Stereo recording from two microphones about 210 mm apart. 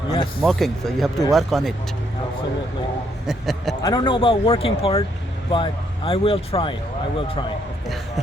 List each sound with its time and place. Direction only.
0.1 s speech: 20° left (ahead or behind)
0.4 s speech: centre (ahead or behind)
3.2 s speech: centre (ahead or behind)
3.8 s speech: 25° left (ahead or behind)